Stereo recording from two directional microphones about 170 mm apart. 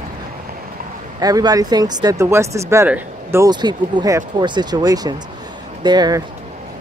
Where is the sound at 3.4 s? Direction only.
25° right (ahead or behind).